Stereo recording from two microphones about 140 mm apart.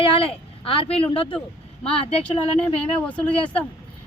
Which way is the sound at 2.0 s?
45° left (ahead or behind).